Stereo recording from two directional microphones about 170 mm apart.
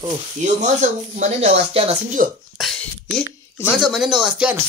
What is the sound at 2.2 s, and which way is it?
Speech, 50° right (ahead or behind).